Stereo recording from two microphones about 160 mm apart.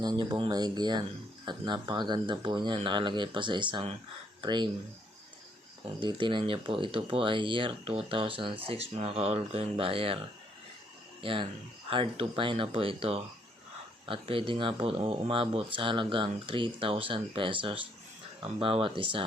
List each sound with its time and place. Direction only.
0.0 s speech: 25° right (ahead or behind)
5.8 s speech: 30° right (ahead or behind)
11.2 s speech: 35° right (ahead or behind)